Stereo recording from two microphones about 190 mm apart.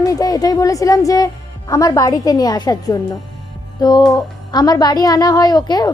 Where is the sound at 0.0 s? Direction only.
20° left (ahead or behind).